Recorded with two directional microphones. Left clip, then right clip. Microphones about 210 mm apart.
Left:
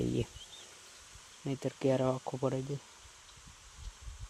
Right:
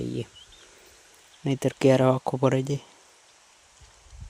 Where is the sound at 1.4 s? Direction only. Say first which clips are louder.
Right 11 dB; 50° right (ahead or behind).